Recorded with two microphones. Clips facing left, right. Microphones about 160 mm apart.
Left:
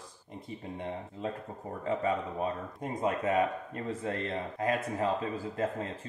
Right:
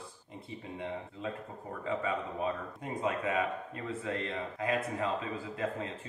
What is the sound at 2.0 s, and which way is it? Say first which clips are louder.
Speech: left 2 dB; 40° left (ahead or behind).